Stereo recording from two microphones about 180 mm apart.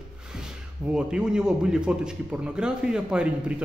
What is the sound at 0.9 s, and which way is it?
A man's voice, 5° right (ahead or behind).